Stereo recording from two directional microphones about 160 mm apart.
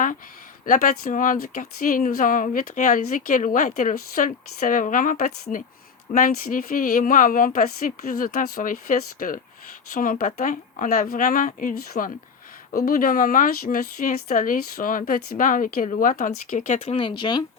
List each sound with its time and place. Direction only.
0.6 s speech: 55° left (ahead or behind)
17.0 s speech: 30° left (ahead or behind)